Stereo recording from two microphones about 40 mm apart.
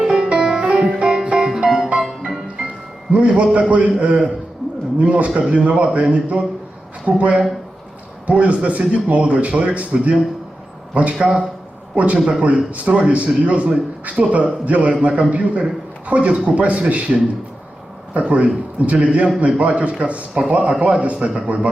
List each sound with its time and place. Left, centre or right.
0.0 s music: right
2.0 s music: centre
3.1 s a man's voice: right
12.2 s a man's voice: centre
12.7 s speech: right